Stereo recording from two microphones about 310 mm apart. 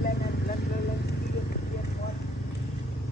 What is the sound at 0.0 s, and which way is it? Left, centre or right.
Vehicle, left.